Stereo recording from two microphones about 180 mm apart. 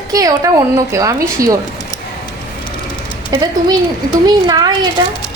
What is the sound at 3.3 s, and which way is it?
A woman's voice, 20° right (ahead or behind).